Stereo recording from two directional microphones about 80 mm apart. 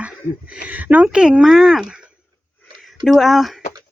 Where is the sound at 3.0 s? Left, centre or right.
Centre.